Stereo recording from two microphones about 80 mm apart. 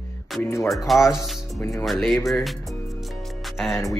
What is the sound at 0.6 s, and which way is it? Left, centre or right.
Speech, centre.